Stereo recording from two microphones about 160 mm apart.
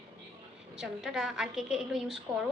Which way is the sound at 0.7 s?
5° right (ahead or behind).